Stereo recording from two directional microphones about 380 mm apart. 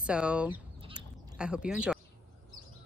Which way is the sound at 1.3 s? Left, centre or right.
Centre.